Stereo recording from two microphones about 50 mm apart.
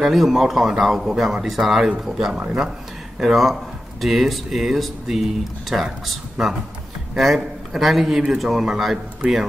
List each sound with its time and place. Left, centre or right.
0.0 s speech: centre
2.3 s speech: right
3.2 s a man's voice: centre